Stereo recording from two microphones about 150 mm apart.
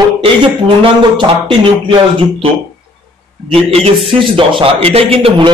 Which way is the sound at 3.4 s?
40° right (ahead or behind).